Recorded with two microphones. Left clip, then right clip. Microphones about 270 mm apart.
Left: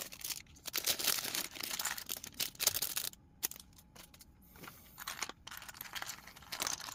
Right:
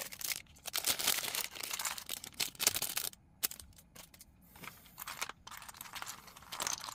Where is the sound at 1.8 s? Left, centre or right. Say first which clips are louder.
Even; centre.